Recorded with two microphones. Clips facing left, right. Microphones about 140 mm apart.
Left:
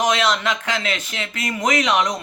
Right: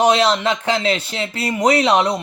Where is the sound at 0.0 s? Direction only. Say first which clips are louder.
Right 5 dB; 30° right (ahead or behind).